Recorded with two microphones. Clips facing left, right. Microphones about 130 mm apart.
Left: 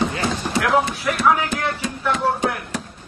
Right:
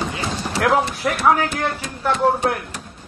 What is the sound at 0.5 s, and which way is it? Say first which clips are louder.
Speech: right 2 dB; 40° right (ahead or behind).